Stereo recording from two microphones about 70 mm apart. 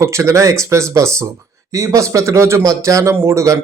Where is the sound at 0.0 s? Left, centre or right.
Right.